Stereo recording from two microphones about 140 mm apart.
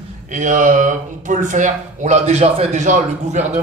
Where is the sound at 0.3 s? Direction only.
65° right (ahead or behind).